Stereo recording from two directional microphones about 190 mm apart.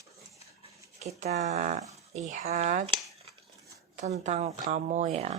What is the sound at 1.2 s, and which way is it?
Speech, 35° right (ahead or behind).